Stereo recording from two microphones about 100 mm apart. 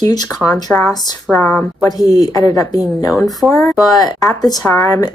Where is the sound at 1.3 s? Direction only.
20° left (ahead or behind).